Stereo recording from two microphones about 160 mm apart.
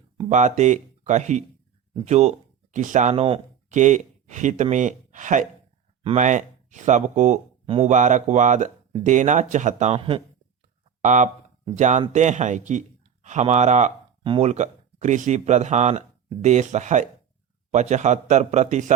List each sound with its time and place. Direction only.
0.3 s speech: 50° right (ahead or behind)
3.8 s speech: 50° right (ahead or behind); by 10.2 s 35° right (ahead or behind)
11.0 s speech: 50° right (ahead or behind)